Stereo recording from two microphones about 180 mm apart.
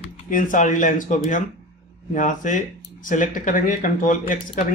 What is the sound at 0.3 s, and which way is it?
Speech, 45° left (ahead or behind).